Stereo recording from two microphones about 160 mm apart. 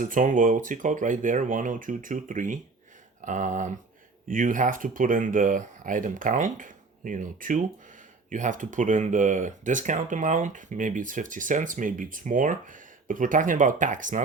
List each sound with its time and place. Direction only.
0.0 s speech: 55° right (ahead or behind)